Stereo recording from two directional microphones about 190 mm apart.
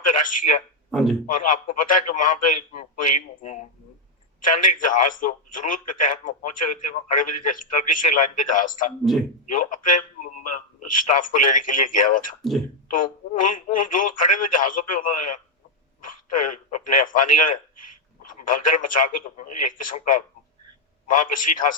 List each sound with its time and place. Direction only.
0.1 s a man's voice: 45° left (ahead or behind)
0.9 s speech: centre (ahead or behind)
1.3 s a man's voice: 45° left (ahead or behind)
9.1 s a man's voice: centre (ahead or behind)
9.5 s a man's voice: 45° left (ahead or behind)